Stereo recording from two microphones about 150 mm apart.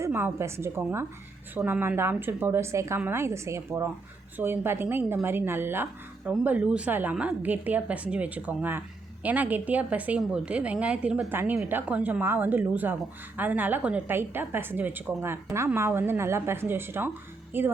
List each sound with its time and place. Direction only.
0.0 s speech: 15° right (ahead or behind)